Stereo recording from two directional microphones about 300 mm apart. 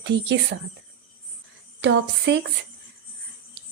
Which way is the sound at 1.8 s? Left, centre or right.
Right.